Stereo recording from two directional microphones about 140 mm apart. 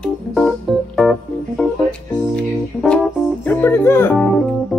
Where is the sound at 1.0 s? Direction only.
Centre (ahead or behind).